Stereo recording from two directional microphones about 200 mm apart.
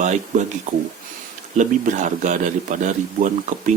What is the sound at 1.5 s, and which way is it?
A man's voice, 35° right (ahead or behind).